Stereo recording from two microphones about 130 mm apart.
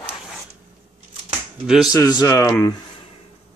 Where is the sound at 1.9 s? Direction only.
25° left (ahead or behind).